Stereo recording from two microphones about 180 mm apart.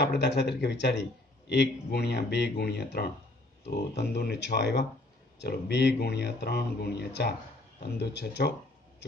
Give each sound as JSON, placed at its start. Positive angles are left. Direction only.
{"t": 0.0, "sound": "speech", "side_deg": 70}